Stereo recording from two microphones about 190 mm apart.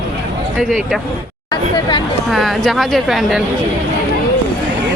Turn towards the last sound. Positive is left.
turn(degrees=0)  # may be behind; listen again after turning